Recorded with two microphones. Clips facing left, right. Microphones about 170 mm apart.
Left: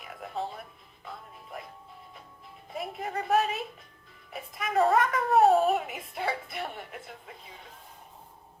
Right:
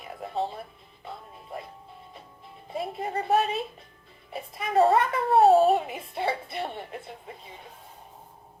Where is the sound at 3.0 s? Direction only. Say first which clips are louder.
Right 2 dB; 30° right (ahead or behind).